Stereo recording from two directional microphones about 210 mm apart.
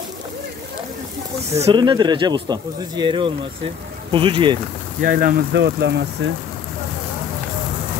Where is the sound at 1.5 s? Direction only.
25° right (ahead or behind).